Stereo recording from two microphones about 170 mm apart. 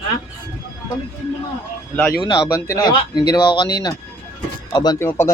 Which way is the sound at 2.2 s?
20° left (ahead or behind).